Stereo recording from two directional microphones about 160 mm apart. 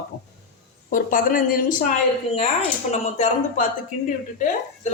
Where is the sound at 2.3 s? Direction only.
40° left (ahead or behind).